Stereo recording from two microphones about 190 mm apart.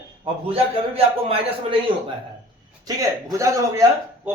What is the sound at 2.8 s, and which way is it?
A man's voice, 15° right (ahead or behind).